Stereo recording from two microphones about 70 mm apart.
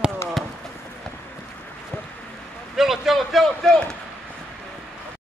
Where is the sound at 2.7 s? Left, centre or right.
Centre.